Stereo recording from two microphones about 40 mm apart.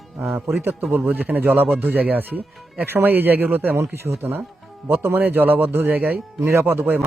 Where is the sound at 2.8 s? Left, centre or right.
Right.